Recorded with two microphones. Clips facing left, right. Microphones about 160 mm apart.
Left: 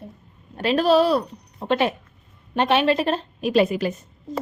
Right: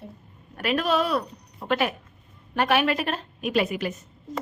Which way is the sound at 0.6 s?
30° left (ahead or behind).